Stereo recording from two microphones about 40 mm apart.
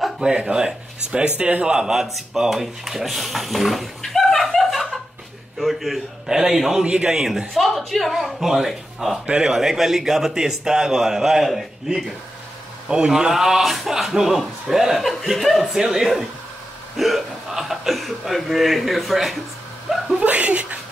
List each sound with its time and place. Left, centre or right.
0.2 s speech: right; by 5.9 s centre
6.2 s a man's voice: centre
7.5 s speech: centre
9.2 s speech: right
9.5 s a man's voice: centre
13.3 s a man's voice: centre
15.6 s a man's voice: centre
16.9 s hiccup: centre
18.8 s speech: centre
19.9 s a sound: centre
20.2 s a sound: right